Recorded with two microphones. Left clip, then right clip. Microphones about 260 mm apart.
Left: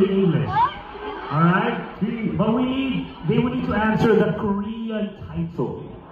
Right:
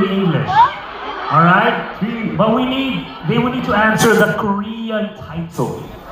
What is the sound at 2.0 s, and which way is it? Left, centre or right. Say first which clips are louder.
A man's voice: right 7 dB; right.